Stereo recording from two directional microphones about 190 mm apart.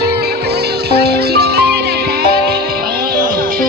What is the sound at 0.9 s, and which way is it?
Music, 55° right (ahead or behind).